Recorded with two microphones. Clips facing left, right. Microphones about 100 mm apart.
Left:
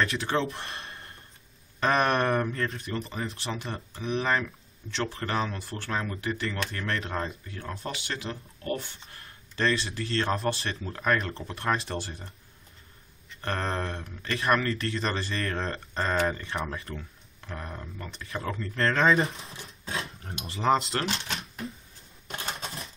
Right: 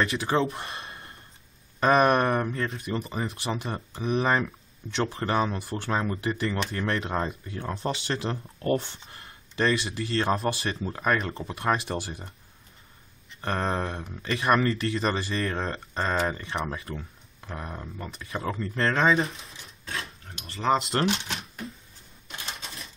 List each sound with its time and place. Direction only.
0.0 s speech: 5° right (ahead or behind)
0.6 s gasp: 5° right (ahead or behind)
1.8 s speech: 10° right (ahead or behind)
4.2 s speech: 20° right (ahead or behind)
9.6 s speech: 10° right (ahead or behind)
13.4 s speech: 5° right (ahead or behind)
14.5 s speech: 15° right (ahead or behind)
18.2 s speech: 5° right (ahead or behind)
19.3 s dishes: 30° left (ahead or behind)
20.5 s speech: centre (ahead or behind)